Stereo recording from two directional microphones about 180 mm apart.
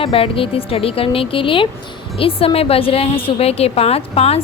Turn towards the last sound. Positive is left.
turn(degrees=35)  # may be behind; listen again after turning